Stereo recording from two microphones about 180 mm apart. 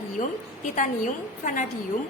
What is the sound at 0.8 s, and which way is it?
Speech, 45° left (ahead or behind).